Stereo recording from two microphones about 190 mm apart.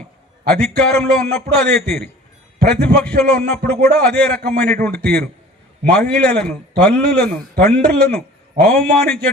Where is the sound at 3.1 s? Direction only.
55° right (ahead or behind).